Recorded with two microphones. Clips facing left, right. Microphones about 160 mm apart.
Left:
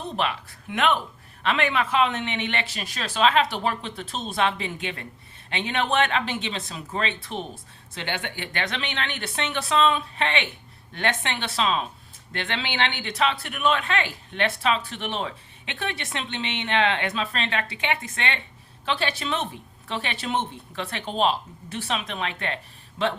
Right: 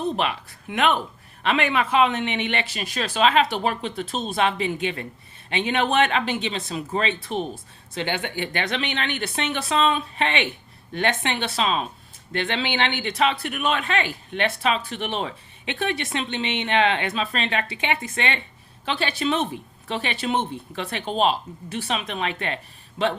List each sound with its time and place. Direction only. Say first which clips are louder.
0.2 s speech: right 1 dB; 10° right (ahead or behind)
18.9 s speech: right 7 dB; 5° right (ahead or behind)